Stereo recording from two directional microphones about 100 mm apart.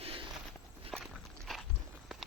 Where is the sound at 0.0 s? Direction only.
65° right (ahead or behind).